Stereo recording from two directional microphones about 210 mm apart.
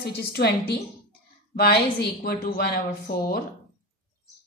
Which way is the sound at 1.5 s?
50° left (ahead or behind).